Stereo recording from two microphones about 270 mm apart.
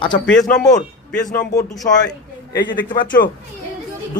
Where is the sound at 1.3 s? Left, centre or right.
Centre.